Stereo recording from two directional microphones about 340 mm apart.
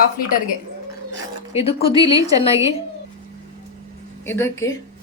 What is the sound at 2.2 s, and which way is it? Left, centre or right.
Speech, centre.